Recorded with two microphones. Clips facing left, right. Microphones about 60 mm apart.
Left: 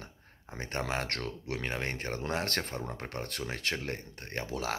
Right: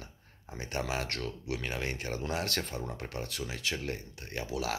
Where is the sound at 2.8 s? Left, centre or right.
Left.